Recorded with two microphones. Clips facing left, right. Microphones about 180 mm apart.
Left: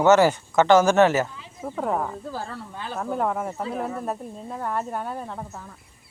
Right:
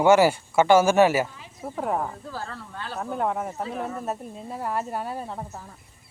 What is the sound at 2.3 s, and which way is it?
Speech, 15° left (ahead or behind).